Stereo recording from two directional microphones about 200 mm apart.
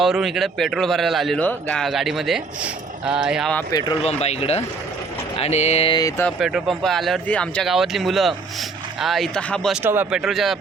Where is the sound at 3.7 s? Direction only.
20° left (ahead or behind).